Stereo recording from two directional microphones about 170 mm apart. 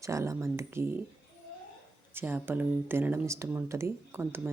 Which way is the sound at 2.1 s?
10° right (ahead or behind).